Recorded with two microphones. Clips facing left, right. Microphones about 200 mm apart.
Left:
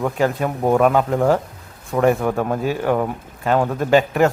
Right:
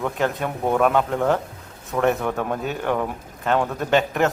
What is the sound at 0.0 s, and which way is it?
A man's voice, 5° left (ahead or behind).